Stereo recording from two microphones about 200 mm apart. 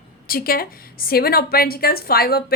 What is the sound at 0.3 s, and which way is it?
A woman's voice, 45° left (ahead or behind).